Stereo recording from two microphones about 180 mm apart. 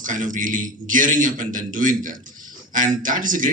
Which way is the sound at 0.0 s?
45° right (ahead or behind).